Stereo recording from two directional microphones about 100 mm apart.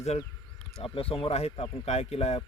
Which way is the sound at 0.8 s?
70° left (ahead or behind).